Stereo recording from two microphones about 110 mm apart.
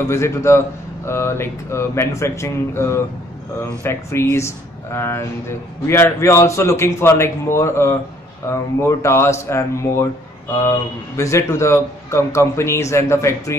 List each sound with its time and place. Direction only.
0.1 s a man's voice: 25° left (ahead or behind)